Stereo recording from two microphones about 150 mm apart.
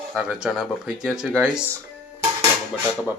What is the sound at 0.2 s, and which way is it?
Speech, 5° right (ahead or behind).